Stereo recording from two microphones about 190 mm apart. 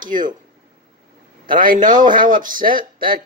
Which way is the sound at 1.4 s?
45° right (ahead or behind).